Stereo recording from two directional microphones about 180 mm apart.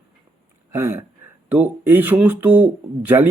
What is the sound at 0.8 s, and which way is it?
Speech, 15° right (ahead or behind).